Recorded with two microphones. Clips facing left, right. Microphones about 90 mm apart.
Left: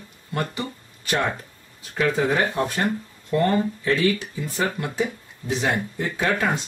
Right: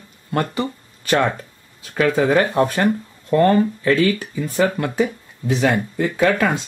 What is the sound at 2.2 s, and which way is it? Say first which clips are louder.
Speech: right 6 dB; 65° right (ahead or behind).